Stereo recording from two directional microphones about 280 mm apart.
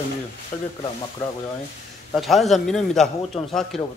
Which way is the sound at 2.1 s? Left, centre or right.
Centre.